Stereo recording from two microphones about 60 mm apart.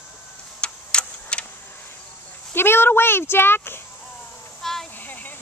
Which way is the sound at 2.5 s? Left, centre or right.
Left.